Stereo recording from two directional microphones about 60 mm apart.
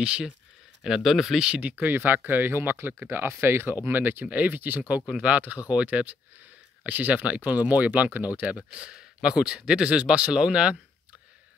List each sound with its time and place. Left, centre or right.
0.0 s speech: centre
0.8 s speech: centre
1.4 s speech: centre
1.7 s speech: right
8.5 s speech: centre